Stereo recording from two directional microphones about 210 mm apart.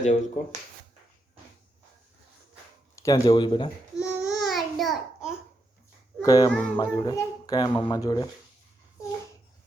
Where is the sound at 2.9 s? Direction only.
15° left (ahead or behind).